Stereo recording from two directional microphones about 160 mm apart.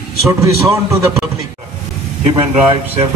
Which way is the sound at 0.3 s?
20° right (ahead or behind).